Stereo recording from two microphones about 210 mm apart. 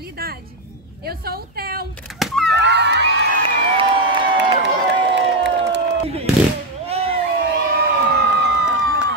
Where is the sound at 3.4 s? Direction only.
25° right (ahead or behind).